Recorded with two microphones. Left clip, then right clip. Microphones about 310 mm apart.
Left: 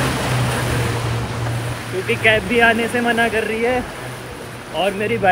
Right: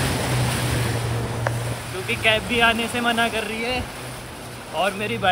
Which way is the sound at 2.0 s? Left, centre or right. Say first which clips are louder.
Left 5 dB; centre.